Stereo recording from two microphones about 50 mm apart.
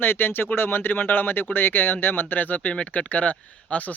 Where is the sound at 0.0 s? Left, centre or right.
Left.